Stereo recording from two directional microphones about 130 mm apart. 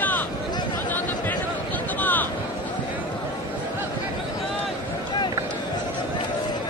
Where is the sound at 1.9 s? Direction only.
15° left (ahead or behind).